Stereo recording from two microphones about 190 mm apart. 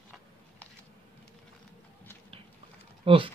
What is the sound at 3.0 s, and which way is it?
Speech, 25° right (ahead or behind).